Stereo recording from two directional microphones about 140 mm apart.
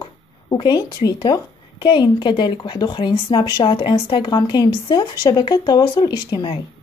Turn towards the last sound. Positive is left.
turn(degrees=35)  # may be behind; listen again after turning